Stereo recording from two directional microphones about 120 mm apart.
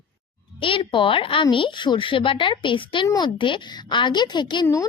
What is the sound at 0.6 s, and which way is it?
A woman's voice, 45° left (ahead or behind).